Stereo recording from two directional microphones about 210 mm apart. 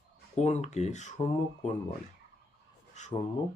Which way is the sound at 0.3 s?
35° left (ahead or behind).